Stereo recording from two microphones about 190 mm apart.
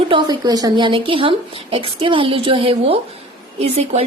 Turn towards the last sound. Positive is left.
turn(degrees=-35)  # may be behind; listen again after turning